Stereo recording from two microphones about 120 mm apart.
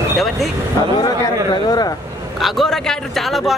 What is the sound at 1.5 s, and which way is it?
Speech, 35° left (ahead or behind).